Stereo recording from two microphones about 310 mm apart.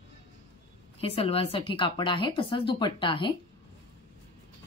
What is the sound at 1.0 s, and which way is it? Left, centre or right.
Speech, centre.